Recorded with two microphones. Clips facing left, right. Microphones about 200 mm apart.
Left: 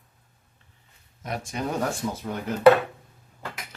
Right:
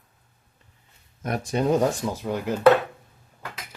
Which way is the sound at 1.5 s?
20° right (ahead or behind).